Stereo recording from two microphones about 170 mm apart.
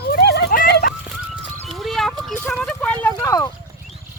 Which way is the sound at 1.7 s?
Centre (ahead or behind).